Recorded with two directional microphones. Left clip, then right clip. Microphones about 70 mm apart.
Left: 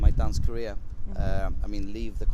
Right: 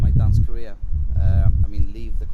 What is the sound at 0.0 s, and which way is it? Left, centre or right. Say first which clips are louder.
Speech: right 4 dB; left.